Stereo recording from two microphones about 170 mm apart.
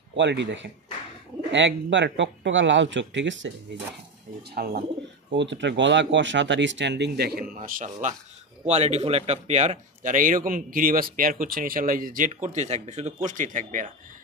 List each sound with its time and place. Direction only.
0.1 s speech: 90° right
4.4 s speech: 65° right (ahead or behind)
5.3 s speech: 90° right; by 8.1 s 50° right (ahead or behind)
8.6 s speech: 40° right (ahead or behind)
12.4 s speech: 40° right (ahead or behind)